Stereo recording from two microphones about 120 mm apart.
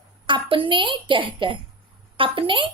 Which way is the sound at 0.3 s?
45° right (ahead or behind).